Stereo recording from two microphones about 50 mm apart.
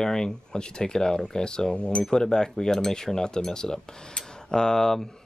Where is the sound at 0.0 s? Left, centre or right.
Centre.